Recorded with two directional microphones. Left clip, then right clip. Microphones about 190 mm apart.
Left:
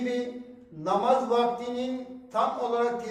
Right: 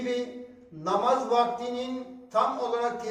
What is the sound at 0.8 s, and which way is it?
A man's voice, 15° left (ahead or behind).